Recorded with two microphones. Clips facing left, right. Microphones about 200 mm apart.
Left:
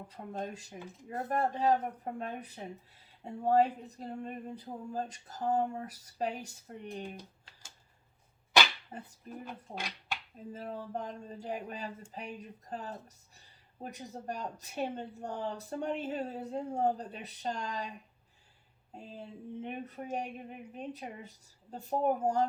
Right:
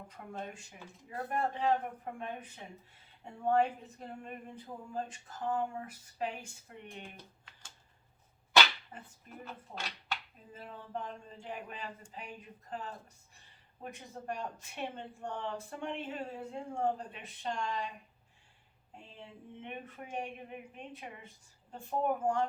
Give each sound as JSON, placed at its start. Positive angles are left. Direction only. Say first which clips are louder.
{"t": 0.1, "sound": "speech", "louder": "left 5 dB", "side_deg": 35}
{"t": 8.9, "sound": "speech", "louder": "left 5 dB", "side_deg": 40}
{"t": 9.4, "sound": "speech", "louder": "left 2 dB", "side_deg": 10}
{"t": 10.5, "sound": "speech", "louder": "left 4 dB", "side_deg": 40}
{"t": 18.9, "sound": "speech", "louder": "left 6 dB", "side_deg": 40}